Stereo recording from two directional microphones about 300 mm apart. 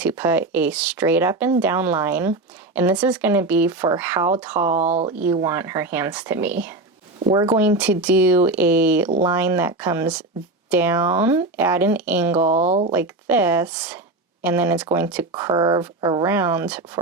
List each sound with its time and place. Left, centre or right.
0.0 s speech: centre
4.7 s speech: right
5.2 s speech: centre
12.5 s speech: right
12.9 s speech: centre